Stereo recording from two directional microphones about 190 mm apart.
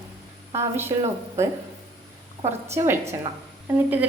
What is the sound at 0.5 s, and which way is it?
Speech, 15° right (ahead or behind).